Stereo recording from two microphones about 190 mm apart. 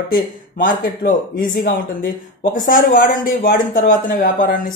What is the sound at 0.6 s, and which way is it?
Speech, 45° left (ahead or behind).